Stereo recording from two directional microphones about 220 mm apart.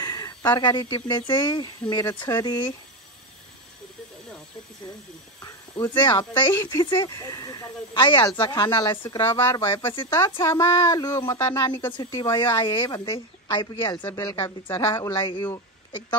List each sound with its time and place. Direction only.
0.0 s speech: 20° left (ahead or behind)
5.4 s speech: 10° left (ahead or behind)
9.2 s a woman's voice: 10° left (ahead or behind)